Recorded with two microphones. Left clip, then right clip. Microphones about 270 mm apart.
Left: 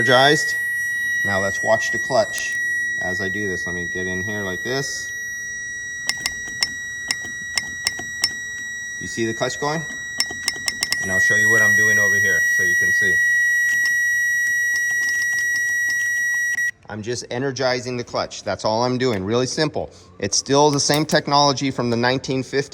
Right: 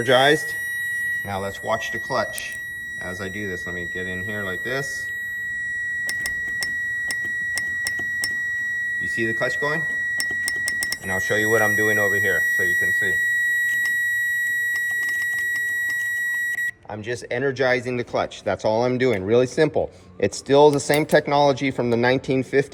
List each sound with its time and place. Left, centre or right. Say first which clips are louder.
0.0 s speech: left 2 dB; centre
9.2 s speech: left 2 dB; centre
11.3 s speech: left 3 dB; centre
14.7 s a sound: left 3 dB; centre
17.4 s speech: right 1 dB; centre